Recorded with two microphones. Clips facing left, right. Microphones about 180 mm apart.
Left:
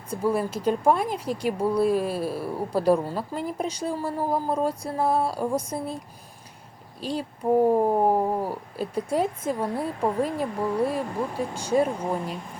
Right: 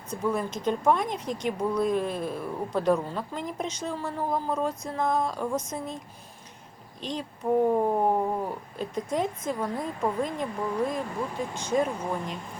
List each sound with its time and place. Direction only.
0.3 s speech: 10° left (ahead or behind)
5.2 s speech: 35° left (ahead or behind)
5.5 s speech: 10° left (ahead or behind)
7.0 s speech: 5° left (ahead or behind)
7.7 s a sound: 20° left (ahead or behind)
8.0 s speech: 30° left (ahead or behind)
8.4 s speech: 10° left (ahead or behind)